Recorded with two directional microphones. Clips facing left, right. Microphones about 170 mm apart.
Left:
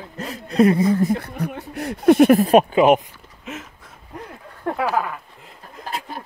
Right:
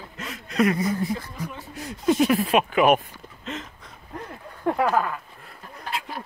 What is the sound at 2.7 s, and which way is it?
Speech, 25° left (ahead or behind).